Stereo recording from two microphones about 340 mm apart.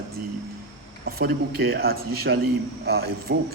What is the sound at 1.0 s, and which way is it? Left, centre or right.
A man's voice, right.